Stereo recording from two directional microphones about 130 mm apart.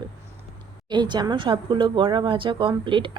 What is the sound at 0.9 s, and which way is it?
Speech, 35° right (ahead or behind).